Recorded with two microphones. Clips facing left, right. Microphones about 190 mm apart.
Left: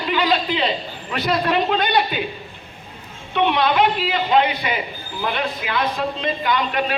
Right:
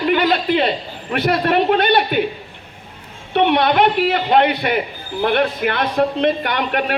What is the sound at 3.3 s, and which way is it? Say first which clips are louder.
A man's voice: right 3 dB; 65° right (ahead or behind).